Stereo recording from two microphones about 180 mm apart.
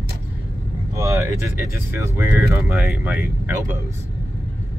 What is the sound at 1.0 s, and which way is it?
Speech, 15° right (ahead or behind).